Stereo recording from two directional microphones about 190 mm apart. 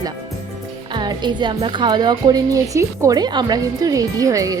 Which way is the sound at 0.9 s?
25° right (ahead or behind).